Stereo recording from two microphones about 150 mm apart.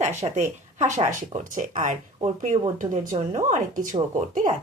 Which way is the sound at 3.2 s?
50° right (ahead or behind).